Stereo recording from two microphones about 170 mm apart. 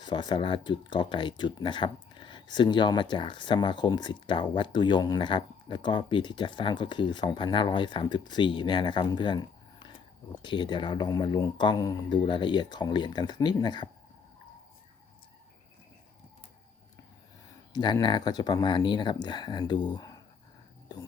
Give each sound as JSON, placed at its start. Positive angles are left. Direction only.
{"t": 0.0, "sound": "speech", "side_deg": 25}
{"t": 17.7, "sound": "speech", "side_deg": 25}